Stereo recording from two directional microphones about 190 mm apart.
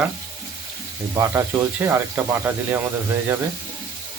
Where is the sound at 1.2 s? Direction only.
15° right (ahead or behind).